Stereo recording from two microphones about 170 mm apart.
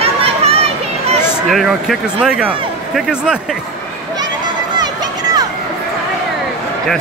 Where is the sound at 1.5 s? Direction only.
Centre (ahead or behind).